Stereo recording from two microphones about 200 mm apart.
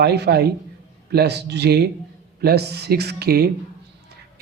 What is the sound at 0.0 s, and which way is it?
A man's voice, 55° right (ahead or behind).